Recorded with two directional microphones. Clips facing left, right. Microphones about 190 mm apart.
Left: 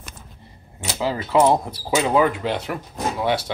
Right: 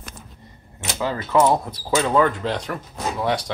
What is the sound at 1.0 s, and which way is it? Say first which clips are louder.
Speech: left 1 dB; 15° left (ahead or behind).